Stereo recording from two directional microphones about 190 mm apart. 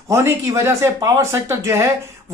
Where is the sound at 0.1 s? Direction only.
15° right (ahead or behind).